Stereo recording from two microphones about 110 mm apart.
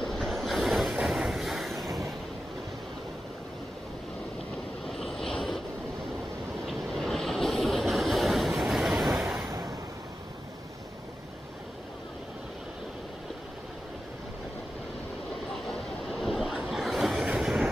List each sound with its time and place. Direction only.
0.0 s train: centre (ahead or behind)
4.8 s vehicle: centre (ahead or behind)
6.7 s vehicle: 5° left (ahead or behind)
9.5 s vehicle: 30° right (ahead or behind)
15.5 s vehicle: 5° left (ahead or behind)